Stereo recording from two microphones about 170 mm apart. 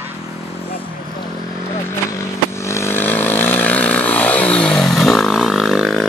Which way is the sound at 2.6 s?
15° left (ahead or behind).